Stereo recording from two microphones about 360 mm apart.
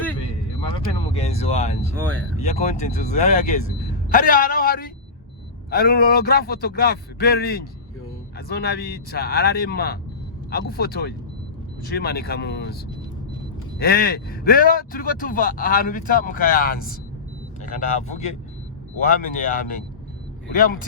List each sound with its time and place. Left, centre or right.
0.6 s speech: centre
13.7 s speech: left